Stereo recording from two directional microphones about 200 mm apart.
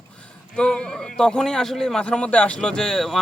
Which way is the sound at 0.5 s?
5° left (ahead or behind).